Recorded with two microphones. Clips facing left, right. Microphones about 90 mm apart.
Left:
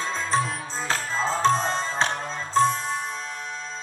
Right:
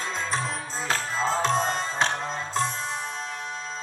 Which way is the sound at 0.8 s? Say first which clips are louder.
Left 1 dB; 35° left (ahead or behind).